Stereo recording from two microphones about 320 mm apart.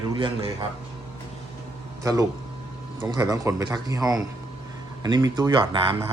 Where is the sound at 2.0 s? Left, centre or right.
Centre.